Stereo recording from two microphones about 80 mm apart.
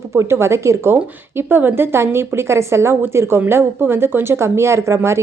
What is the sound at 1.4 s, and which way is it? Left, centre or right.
Speech, right.